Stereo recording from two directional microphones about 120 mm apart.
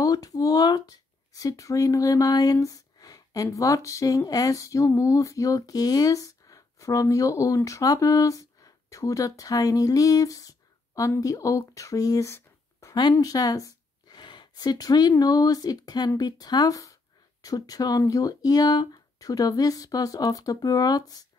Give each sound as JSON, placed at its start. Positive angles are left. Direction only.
{"t": 0.0, "sound": "speech", "side_deg": 30}